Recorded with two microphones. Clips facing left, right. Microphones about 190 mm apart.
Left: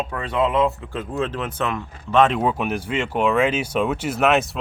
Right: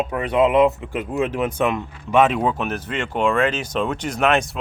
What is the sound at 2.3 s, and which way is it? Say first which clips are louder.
Speech: even; 10° left (ahead or behind).